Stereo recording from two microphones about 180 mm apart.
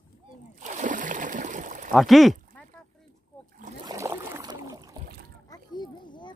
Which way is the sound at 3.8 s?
15° right (ahead or behind).